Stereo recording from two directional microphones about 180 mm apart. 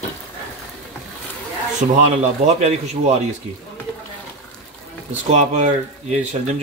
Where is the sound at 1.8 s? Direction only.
45° right (ahead or behind).